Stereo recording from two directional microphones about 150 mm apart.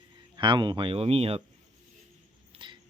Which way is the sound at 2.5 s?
35° right (ahead or behind).